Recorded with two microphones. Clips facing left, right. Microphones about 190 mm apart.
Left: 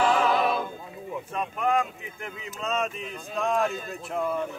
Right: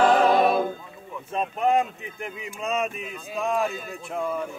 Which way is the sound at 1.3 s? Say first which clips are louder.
Right 4 dB; 25° right (ahead or behind).